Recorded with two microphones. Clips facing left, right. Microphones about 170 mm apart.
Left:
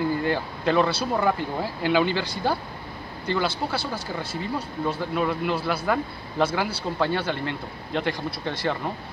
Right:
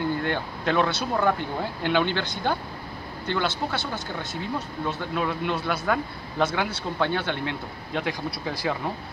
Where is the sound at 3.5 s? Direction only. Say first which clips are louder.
Left 1 dB; 30° left (ahead or behind).